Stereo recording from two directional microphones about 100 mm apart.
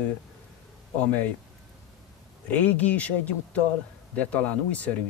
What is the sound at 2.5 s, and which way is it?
Speech, 15° left (ahead or behind).